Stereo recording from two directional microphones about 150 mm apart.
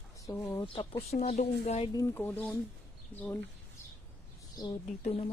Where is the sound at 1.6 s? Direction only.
50° left (ahead or behind).